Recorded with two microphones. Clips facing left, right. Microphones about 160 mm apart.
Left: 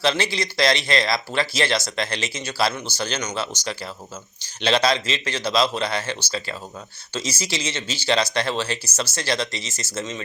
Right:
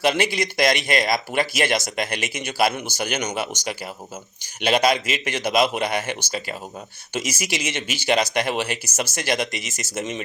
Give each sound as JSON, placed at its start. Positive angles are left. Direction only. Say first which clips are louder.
{"t": 0.0, "sound": "speech", "louder": "right 2 dB", "side_deg": -15}